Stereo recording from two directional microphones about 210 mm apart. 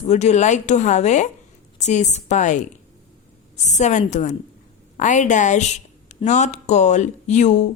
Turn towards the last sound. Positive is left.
turn(degrees=35)  # may be behind; listen again after turning